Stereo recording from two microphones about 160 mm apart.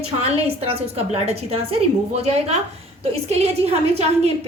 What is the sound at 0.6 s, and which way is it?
A woman's voice, 40° right (ahead or behind).